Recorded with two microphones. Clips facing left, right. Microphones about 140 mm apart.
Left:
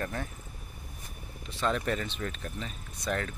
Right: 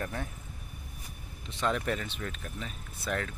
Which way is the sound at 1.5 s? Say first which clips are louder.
Left 1 dB; 15° right (ahead or behind).